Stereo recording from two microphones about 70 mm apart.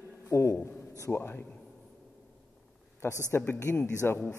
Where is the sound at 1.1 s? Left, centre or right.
Left.